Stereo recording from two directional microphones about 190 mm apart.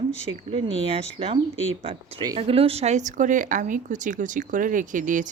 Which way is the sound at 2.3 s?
30° right (ahead or behind).